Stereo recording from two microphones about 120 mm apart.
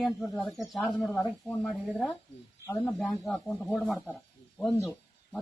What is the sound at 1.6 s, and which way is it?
Speech, centre (ahead or behind).